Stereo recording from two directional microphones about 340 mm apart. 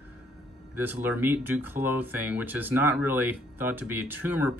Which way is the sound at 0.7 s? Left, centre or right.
Centre.